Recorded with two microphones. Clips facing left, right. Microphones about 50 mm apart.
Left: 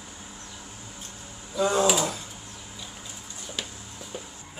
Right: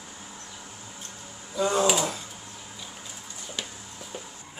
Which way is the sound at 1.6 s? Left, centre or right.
Centre.